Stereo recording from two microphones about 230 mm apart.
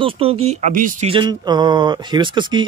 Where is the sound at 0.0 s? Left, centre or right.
Right.